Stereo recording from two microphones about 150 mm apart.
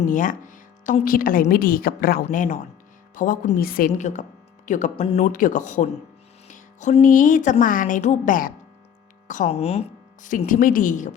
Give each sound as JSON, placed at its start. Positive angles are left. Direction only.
{"t": 0.0, "sound": "a woman's voice", "side_deg": 60}
{"t": 4.9, "sound": "speech", "side_deg": 40}
{"t": 5.2, "sound": "a woman's voice", "side_deg": 65}
{"t": 6.5, "sound": "music", "side_deg": 55}
{"t": 7.6, "sound": "a woman's voice", "side_deg": 60}
{"t": 9.5, "sound": "speech", "side_deg": 40}
{"t": 10.2, "sound": "a woman's voice", "side_deg": 60}